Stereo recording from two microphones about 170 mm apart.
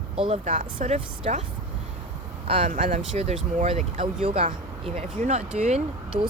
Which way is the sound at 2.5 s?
40° right (ahead or behind).